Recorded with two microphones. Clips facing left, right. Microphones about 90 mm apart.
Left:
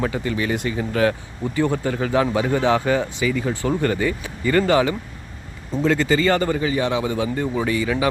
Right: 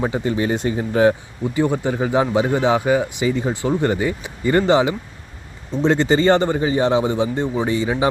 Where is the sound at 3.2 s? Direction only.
25° right (ahead or behind).